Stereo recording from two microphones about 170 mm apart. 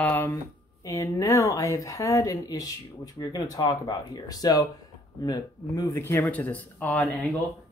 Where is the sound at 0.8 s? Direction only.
20° left (ahead or behind).